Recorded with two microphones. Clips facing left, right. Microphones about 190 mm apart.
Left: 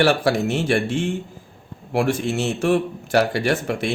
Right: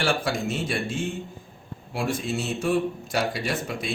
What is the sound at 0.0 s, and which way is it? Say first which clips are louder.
A man's voice: left 8 dB; 65° left (ahead or behind).